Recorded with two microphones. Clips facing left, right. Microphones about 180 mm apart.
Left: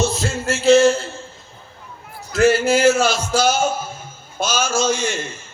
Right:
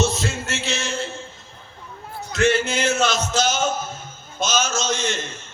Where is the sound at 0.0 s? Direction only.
30° left (ahead or behind).